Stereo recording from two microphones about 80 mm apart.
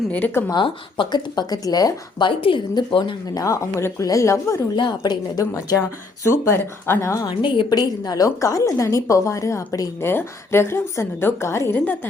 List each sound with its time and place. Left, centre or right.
0.4 s speech: left
2.2 s speech: left
3.3 s a woman's voice: left
4.8 s speech: left
5.4 s speech: left
6.3 s a woman's voice: left
7.3 s a woman's voice: left
7.7 s a woman's voice: left